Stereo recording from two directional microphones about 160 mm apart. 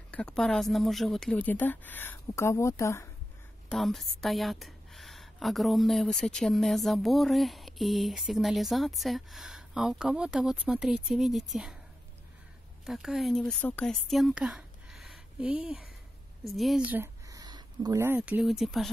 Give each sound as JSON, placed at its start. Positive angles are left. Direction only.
{"t": 0.1, "sound": "speech", "side_deg": 5}
{"t": 3.6, "sound": "a woman's voice", "side_deg": 0}
{"t": 12.8, "sound": "a woman's voice", "side_deg": 0}
{"t": 17.3, "sound": "a sound", "side_deg": -25}
{"t": 18.0, "sound": "a woman's voice", "side_deg": -10}